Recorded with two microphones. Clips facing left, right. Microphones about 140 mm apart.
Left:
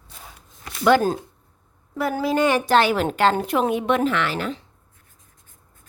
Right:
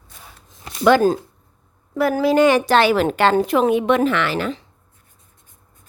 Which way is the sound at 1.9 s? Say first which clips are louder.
Right 6 dB; 80° right.